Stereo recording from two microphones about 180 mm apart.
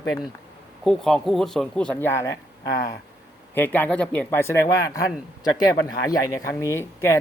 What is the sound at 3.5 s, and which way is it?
Speech, 10° left (ahead or behind).